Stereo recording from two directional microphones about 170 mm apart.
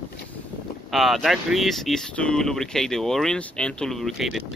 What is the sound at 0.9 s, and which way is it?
Speech, centre (ahead or behind).